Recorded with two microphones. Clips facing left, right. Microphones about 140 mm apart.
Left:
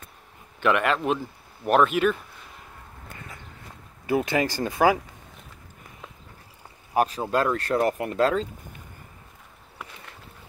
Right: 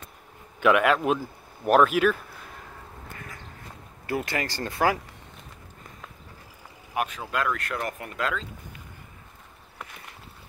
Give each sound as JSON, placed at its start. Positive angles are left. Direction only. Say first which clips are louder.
{"t": 0.6, "sound": "a man's voice", "louder": "right 2 dB", "side_deg": -5}
{"t": 4.0, "sound": "speech", "louder": "left 6 dB", "side_deg": 20}
{"t": 6.9, "sound": "speech", "louder": "left 6 dB", "side_deg": 35}